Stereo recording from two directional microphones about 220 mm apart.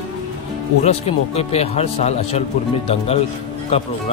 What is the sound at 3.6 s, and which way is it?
Speech, 30° left (ahead or behind).